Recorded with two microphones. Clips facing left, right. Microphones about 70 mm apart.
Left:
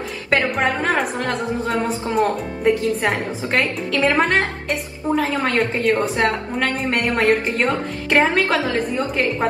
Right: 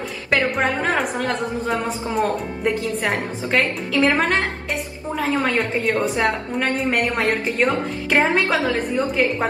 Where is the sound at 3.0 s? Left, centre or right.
Centre.